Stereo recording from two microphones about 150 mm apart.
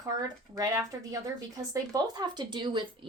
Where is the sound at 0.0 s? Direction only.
25° right (ahead or behind).